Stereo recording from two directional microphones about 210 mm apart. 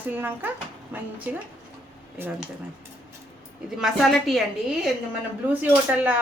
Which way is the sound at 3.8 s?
Centre (ahead or behind).